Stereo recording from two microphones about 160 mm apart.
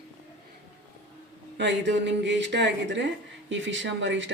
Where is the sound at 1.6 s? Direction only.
90° right.